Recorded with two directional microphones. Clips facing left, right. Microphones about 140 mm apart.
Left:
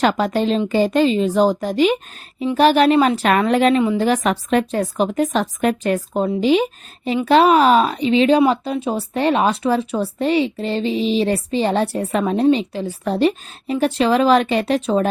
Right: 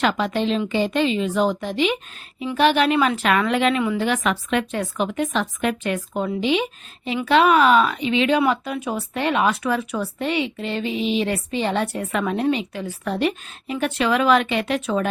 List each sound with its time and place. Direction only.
0.0 s speech: 40° left (ahead or behind)